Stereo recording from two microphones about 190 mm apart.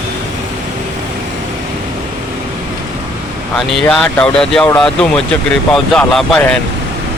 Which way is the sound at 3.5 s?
Centre (ahead or behind).